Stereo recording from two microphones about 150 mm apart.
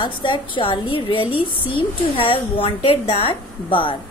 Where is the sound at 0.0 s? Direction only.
30° left (ahead or behind).